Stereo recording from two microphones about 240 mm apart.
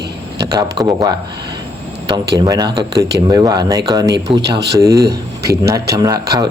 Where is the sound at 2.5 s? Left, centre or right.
Centre.